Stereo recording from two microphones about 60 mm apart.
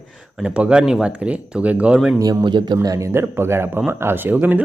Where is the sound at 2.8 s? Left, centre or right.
Right.